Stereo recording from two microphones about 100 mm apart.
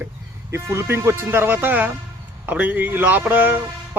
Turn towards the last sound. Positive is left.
turn(degrees=-15)  # may be behind; listen again after turning